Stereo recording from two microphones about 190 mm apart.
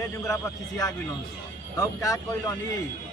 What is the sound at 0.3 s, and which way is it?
Speech, 20° left (ahead or behind).